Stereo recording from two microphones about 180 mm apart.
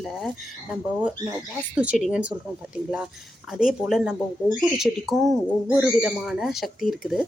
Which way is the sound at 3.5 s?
5° right (ahead or behind).